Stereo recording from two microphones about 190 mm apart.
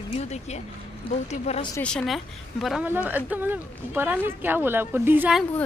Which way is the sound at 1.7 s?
5° left (ahead or behind).